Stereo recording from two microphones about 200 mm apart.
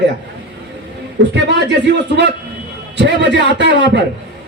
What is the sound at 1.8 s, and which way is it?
A man's voice, 60° right (ahead or behind).